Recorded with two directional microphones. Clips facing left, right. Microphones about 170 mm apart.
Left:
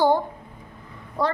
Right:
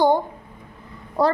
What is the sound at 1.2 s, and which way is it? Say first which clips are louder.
Speech: right 5 dB; 40° right (ahead or behind).